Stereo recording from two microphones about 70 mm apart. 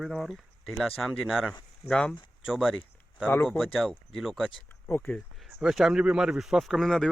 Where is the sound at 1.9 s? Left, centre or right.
Centre.